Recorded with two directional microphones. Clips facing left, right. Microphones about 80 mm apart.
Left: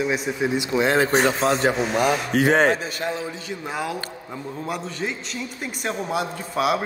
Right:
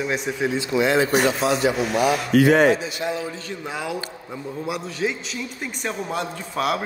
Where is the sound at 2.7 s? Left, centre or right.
Left.